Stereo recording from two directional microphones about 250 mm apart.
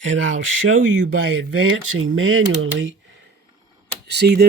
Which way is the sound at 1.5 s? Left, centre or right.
Right.